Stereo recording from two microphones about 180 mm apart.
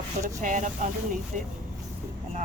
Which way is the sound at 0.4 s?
45° right (ahead or behind).